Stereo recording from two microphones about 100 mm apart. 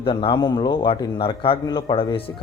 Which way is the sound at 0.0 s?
60° left (ahead or behind).